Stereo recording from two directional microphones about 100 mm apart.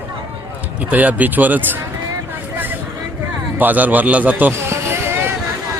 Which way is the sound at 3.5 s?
15° right (ahead or behind).